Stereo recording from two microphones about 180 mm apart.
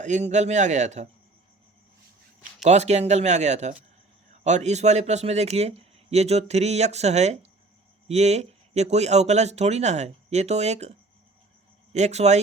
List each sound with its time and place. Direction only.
0.0 s speech: 40° right (ahead or behind)
2.6 s speech: 40° right (ahead or behind)
11.9 s speech: 40° right (ahead or behind)